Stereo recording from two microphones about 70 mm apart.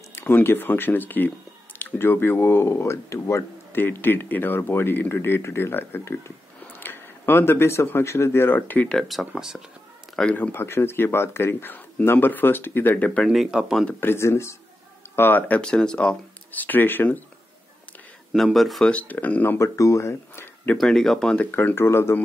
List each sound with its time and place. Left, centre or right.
0.1 s speech: left
3.7 s speech: left
8.8 s speech: centre
9.2 s speech: centre
10.3 s speech: left
12.9 s speech: centre
13.3 s speech: centre
13.9 s speech: left
15.1 s speech: left
15.7 s speech: centre; by 17.2 s left
18.3 s speech: centre
18.9 s speech: left
20.7 s speech: centre
21.4 s speech: left